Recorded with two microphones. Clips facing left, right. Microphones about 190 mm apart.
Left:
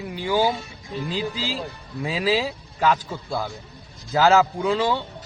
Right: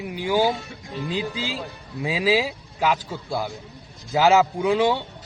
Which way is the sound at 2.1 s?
15° right (ahead or behind).